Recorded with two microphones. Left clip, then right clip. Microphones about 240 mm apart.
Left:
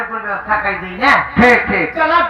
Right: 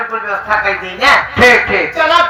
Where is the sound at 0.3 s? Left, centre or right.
Right.